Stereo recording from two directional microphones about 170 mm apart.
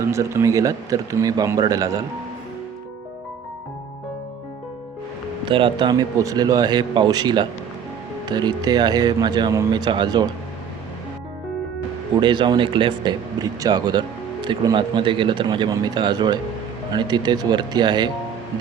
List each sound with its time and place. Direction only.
0.0 s speech: 15° right (ahead or behind)
5.5 s speech: 30° right (ahead or behind)
12.2 s speech: 25° right (ahead or behind)